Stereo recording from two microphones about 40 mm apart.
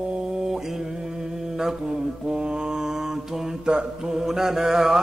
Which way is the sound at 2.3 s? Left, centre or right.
Right.